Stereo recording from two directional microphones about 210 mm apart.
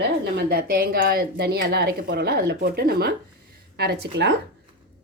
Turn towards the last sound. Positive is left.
turn(degrees=-50)  # may be behind; listen again after turning